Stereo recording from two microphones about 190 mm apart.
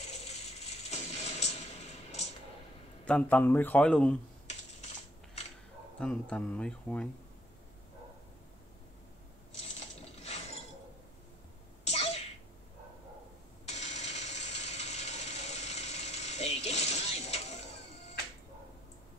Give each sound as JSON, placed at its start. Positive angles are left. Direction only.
{"t": 0.1, "sound": "ratchet", "side_deg": 35}
{"t": 3.1, "sound": "speech", "side_deg": 5}
{"t": 5.9, "sound": "speech", "side_deg": 5}
{"t": 10.1, "sound": "a sound", "side_deg": 35}
{"t": 11.8, "sound": "sneeze", "side_deg": 35}
{"t": 13.7, "sound": "ratchet", "side_deg": 35}